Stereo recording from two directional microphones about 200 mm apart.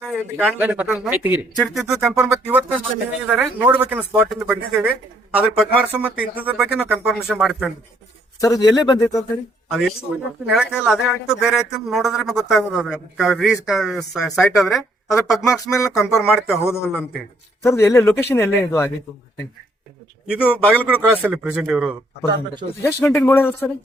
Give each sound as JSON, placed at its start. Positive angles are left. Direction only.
{"t": 0.1, "sound": "speech", "side_deg": -5}
{"t": 1.5, "sound": "a man's voice", "side_deg": 0}
{"t": 8.4, "sound": "a man's voice", "side_deg": 20}
{"t": 10.5, "sound": "a man's voice", "side_deg": -5}
{"t": 16.6, "sound": "a man's voice", "side_deg": 15}
{"t": 20.3, "sound": "a man's voice", "side_deg": -5}
{"t": 22.8, "sound": "a man's voice", "side_deg": 10}